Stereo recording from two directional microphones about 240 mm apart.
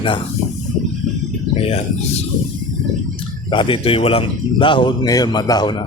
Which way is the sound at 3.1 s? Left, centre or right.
Left.